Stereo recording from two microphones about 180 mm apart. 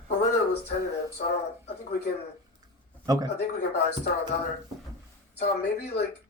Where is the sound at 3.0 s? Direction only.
20° right (ahead or behind).